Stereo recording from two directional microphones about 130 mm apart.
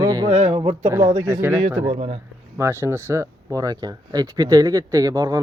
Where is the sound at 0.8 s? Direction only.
20° right (ahead or behind).